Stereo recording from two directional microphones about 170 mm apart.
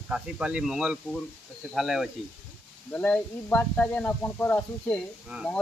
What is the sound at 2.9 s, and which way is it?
Speech, 10° left (ahead or behind).